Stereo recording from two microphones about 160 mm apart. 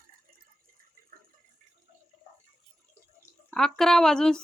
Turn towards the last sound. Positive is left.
turn(degrees=5)  # may be behind; listen again after turning